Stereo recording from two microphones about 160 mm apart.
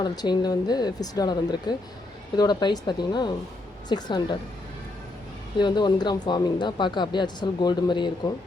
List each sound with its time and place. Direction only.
0.0 s speech: 25° left (ahead or behind)
5.5 s speech: 30° left (ahead or behind)